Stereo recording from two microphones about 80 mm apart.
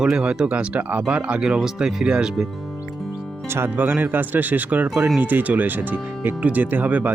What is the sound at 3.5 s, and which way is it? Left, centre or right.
Speech, right.